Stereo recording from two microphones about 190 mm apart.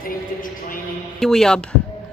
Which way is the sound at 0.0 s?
45° left (ahead or behind).